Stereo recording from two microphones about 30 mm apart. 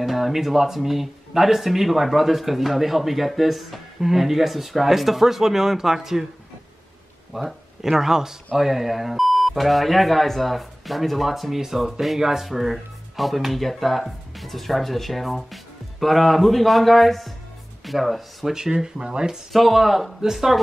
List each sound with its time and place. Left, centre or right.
0.0 s speech: centre
7.3 s speech: centre
18.5 s speech: right
19.5 s speech: centre